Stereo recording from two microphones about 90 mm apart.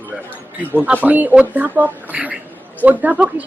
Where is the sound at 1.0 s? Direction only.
20° right (ahead or behind).